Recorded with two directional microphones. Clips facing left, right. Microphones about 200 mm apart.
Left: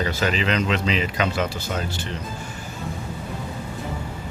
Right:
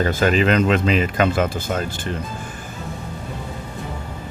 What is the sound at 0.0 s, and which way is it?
Speech, 50° right (ahead or behind).